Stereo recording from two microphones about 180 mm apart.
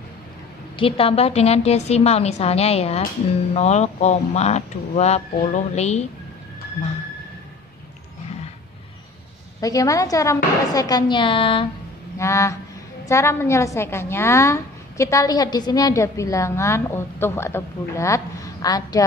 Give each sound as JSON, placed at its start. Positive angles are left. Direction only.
{"t": 0.7, "sound": "speech", "side_deg": 30}
{"t": 9.6, "sound": "a woman's voice", "side_deg": 20}
{"t": 12.2, "sound": "a woman's voice", "side_deg": 15}